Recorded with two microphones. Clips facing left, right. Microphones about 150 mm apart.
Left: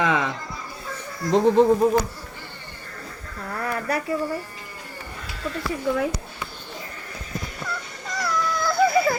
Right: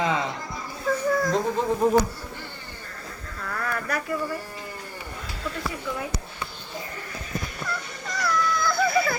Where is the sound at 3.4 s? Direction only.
30° left (ahead or behind).